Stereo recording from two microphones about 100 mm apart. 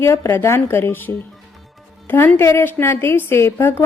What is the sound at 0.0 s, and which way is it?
A woman's voice, 25° left (ahead or behind).